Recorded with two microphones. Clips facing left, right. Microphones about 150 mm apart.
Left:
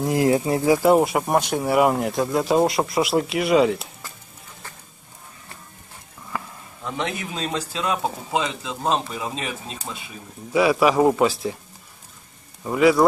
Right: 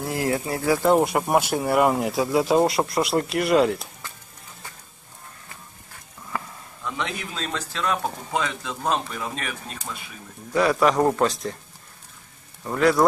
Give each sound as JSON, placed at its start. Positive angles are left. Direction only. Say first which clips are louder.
{"t": 0.0, "sound": "speech", "louder": "left 6 dB", "side_deg": 20}
{"t": 0.8, "sound": "speech", "louder": "left 2 dB", "side_deg": 5}
{"t": 6.3, "sound": "a sound", "louder": "even", "side_deg": 0}
{"t": 6.8, "sound": "speech", "louder": "left 2 dB", "side_deg": 25}
{"t": 10.5, "sound": "speech", "louder": "left 2 dB", "side_deg": 5}
{"t": 12.6, "sound": "speech", "louder": "left 3 dB", "side_deg": 5}